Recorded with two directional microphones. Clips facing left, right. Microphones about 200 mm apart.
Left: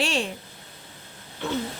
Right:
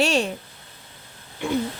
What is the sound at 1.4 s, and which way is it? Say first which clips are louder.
Speech: right 4 dB; 15° right (ahead or behind).